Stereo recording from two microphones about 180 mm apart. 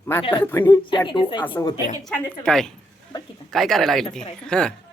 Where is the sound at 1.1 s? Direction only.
25° left (ahead or behind).